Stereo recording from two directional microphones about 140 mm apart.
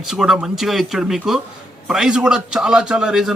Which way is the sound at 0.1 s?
5° right (ahead or behind).